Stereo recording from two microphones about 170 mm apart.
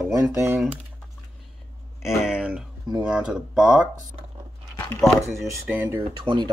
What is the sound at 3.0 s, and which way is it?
Speech, 5° right (ahead or behind).